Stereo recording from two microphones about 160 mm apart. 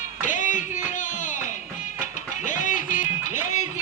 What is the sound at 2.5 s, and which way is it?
Music, 50° left (ahead or behind).